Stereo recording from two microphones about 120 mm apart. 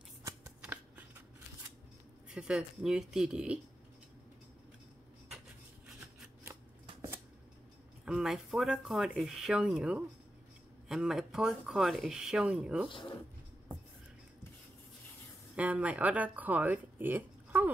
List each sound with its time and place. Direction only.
0.2 s shuffling cards: 30° right (ahead or behind)
0.6 s shuffling cards: 10° right (ahead or behind)
2.3 s speech: 5° right (ahead or behind)
8.0 s speech: 5° right (ahead or behind)
15.5 s speech: 10° right (ahead or behind)